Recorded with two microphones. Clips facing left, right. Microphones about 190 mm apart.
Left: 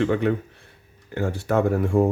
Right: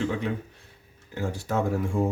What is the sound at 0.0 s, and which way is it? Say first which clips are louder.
Speech: left 7 dB; 60° left (ahead or behind).